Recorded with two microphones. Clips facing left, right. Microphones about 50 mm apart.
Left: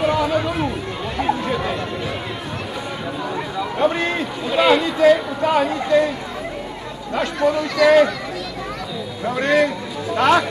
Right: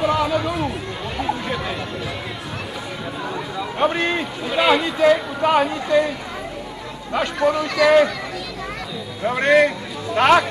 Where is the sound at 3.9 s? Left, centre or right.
Centre.